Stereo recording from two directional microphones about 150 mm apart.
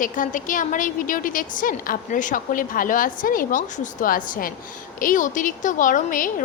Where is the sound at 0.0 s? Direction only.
60° left (ahead or behind).